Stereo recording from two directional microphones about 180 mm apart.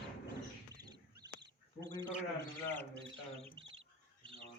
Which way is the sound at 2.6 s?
10° left (ahead or behind).